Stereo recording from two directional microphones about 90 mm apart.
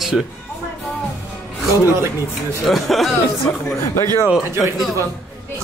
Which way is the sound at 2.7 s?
Centre (ahead or behind).